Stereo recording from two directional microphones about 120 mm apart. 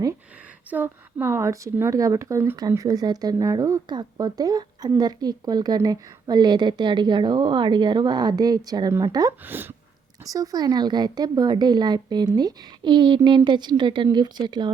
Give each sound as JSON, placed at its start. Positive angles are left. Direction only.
{"t": 0.7, "sound": "a woman's voice", "side_deg": -15}
{"t": 9.4, "sound": "speech", "side_deg": -15}
{"t": 10.2, "sound": "speech", "side_deg": -30}